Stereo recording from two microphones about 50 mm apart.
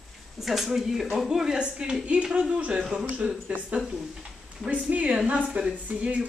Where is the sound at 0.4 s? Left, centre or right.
Centre; by 3.5 s right.